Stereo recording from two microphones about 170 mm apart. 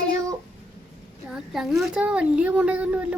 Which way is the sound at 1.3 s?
Centre (ahead or behind).